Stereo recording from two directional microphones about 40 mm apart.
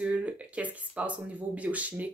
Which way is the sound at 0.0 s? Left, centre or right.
Right.